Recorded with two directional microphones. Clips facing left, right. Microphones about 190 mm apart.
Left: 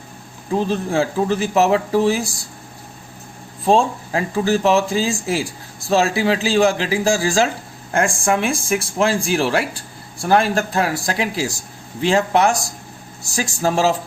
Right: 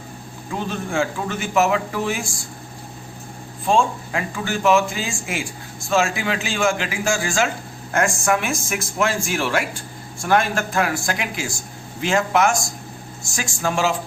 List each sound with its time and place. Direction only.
0.5 s speech: 35° left (ahead or behind)
3.7 s speech: 35° left (ahead or behind)